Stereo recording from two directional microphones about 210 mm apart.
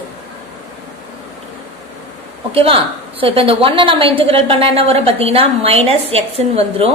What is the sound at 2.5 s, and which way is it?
A woman's voice, 25° right (ahead or behind).